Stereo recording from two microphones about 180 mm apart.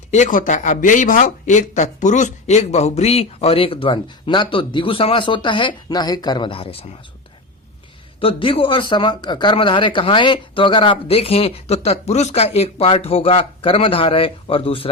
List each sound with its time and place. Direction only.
0.1 s speech: 45° left (ahead or behind)
8.2 s speech: 30° left (ahead or behind)